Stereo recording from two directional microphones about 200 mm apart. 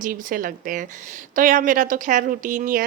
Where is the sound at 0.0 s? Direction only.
45° right (ahead or behind).